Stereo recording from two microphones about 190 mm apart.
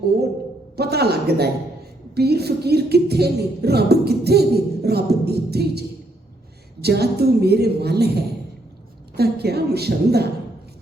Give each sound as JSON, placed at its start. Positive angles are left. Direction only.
{"t": 0.8, "sound": "music", "side_deg": -55}
{"t": 6.8, "sound": "music", "side_deg": -60}